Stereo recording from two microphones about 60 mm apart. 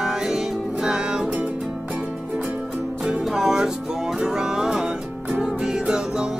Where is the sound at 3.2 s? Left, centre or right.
Centre.